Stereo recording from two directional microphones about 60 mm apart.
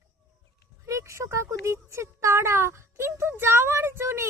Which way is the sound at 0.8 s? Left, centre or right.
Right.